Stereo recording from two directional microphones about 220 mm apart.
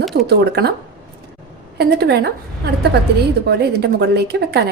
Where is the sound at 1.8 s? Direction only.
50° right (ahead or behind).